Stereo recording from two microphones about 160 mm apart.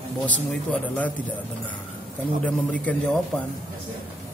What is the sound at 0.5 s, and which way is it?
Speech, 10° left (ahead or behind).